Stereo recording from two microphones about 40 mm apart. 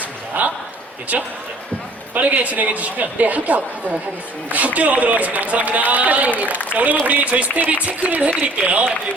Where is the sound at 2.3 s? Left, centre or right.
Right.